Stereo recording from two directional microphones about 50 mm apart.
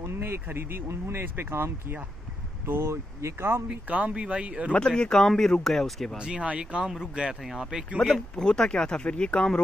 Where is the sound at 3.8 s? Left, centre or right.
Right.